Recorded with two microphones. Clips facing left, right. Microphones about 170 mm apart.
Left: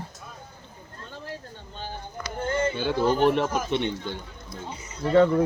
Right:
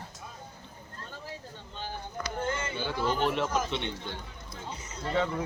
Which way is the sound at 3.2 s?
55° left (ahead or behind).